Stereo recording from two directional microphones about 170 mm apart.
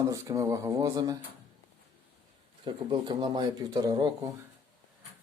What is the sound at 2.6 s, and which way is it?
Speech, 25° right (ahead or behind).